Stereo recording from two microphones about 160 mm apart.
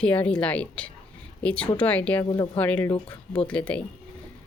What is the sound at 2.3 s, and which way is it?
Speech, 30° left (ahead or behind).